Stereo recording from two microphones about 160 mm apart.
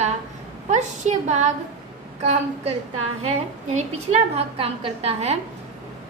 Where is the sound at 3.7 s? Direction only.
40° right (ahead or behind).